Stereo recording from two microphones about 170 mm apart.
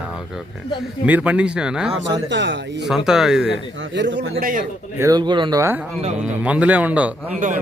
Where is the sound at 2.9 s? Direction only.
Centre (ahead or behind).